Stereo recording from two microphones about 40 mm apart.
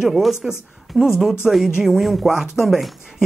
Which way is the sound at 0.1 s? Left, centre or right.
Centre.